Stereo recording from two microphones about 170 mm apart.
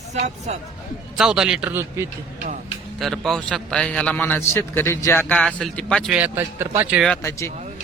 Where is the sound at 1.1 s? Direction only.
5° right (ahead or behind).